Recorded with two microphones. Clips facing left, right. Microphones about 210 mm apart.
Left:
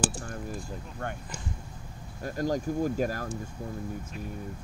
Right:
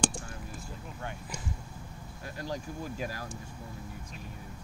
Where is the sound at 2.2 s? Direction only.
45° left (ahead or behind).